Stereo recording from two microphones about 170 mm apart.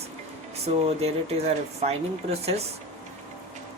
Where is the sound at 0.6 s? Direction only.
40° right (ahead or behind).